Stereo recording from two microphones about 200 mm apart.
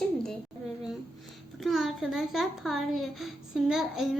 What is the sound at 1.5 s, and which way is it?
A child's voice, centre (ahead or behind).